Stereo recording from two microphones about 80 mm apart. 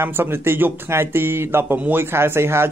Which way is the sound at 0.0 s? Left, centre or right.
Right.